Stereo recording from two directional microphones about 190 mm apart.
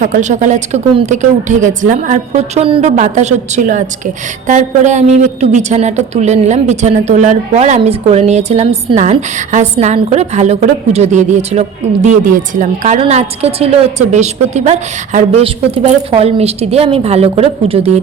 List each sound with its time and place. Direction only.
0.0 s a woman's voice: 40° right (ahead or behind)